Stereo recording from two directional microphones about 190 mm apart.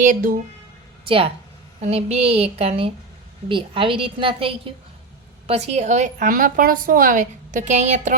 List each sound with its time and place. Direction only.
0.0 s speech: 45° right (ahead or behind)
1.0 s a woman's voice: 30° right (ahead or behind)